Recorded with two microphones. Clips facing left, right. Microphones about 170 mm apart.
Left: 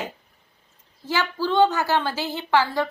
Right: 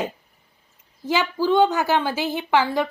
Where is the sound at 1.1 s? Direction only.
15° right (ahead or behind).